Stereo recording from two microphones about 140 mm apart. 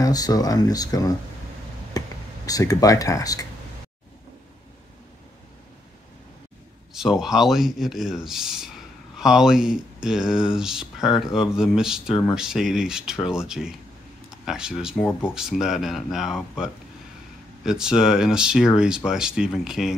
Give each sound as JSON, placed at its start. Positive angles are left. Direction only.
{"t": 0.0, "sound": "speech", "side_deg": 25}
{"t": 6.9, "sound": "speech", "side_deg": -5}